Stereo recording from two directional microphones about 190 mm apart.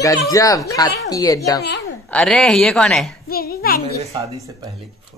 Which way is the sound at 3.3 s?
50° left (ahead or behind).